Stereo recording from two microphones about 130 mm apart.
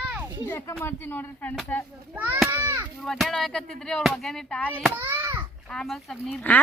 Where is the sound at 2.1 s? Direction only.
15° right (ahead or behind).